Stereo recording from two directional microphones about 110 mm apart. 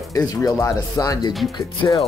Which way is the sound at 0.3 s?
30° left (ahead or behind).